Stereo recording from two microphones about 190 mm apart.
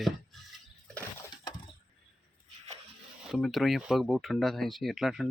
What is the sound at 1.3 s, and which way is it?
Breaking, 20° left (ahead or behind).